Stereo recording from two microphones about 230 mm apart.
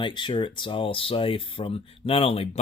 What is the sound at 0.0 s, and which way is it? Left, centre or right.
Speech, left.